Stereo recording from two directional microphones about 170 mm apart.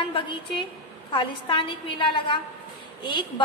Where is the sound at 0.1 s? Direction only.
30° left (ahead or behind).